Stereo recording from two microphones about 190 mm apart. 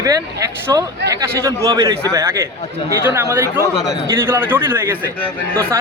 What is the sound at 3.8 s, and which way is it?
A man's voice, centre (ahead or behind).